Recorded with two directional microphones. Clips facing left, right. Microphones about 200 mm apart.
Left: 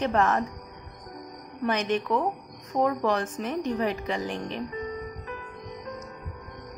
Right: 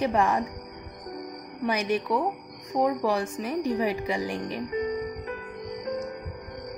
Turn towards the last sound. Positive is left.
turn(degrees=-20)  # may be behind; listen again after turning